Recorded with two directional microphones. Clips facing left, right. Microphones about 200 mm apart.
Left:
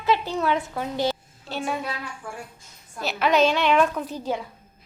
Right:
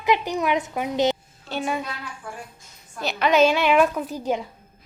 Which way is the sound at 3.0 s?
Centre (ahead or behind).